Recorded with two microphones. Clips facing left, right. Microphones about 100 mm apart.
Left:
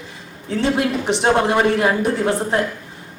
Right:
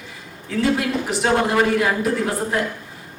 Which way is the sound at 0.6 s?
25° left (ahead or behind).